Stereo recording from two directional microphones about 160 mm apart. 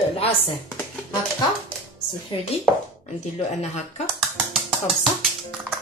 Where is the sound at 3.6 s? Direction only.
45° left (ahead or behind).